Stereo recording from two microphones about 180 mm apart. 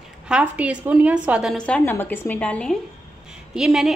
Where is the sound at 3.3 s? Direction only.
5° right (ahead or behind).